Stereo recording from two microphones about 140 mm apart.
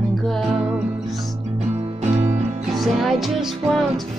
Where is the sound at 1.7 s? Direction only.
50° right (ahead or behind).